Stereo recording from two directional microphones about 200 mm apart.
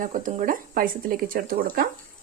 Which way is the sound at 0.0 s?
40° right (ahead or behind).